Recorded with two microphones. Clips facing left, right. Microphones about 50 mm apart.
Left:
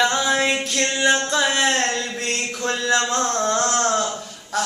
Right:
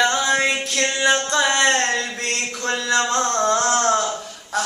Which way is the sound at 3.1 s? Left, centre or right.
Centre.